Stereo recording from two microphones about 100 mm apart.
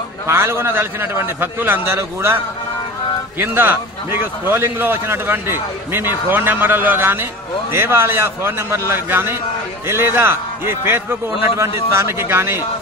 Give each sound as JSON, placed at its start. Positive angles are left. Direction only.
{"t": 0.3, "sound": "a man's voice", "side_deg": -25}